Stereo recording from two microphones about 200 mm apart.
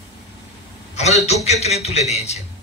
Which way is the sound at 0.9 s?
35° left (ahead or behind).